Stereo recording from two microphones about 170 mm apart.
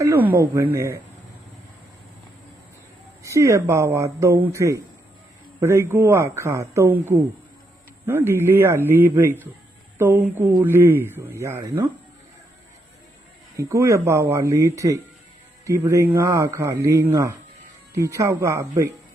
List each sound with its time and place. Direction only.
0.0 s speech: 15° right (ahead or behind)
3.2 s speech: 15° right (ahead or behind)
13.6 s speech: 20° right (ahead or behind)